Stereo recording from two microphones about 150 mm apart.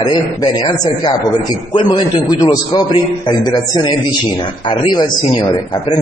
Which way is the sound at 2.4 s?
25° left (ahead or behind).